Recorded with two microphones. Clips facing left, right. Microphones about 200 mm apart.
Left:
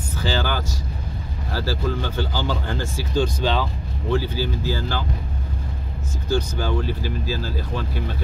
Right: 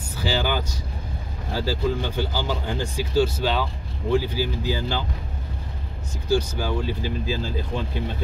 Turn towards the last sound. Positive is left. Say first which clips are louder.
# even
turn(degrees=-20)  # may be behind; listen again after turning